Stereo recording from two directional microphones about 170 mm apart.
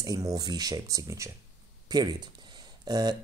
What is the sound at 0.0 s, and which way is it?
Speech, 20° right (ahead or behind).